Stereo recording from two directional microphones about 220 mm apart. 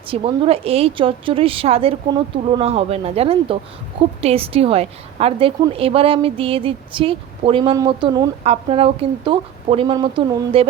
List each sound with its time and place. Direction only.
0.1 s a woman's voice: 25° right (ahead or behind)